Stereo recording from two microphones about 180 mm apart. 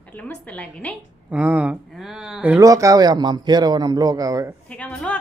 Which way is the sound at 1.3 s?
10° right (ahead or behind).